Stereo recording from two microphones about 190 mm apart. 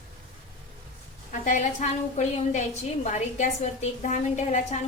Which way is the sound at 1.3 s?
40° left (ahead or behind).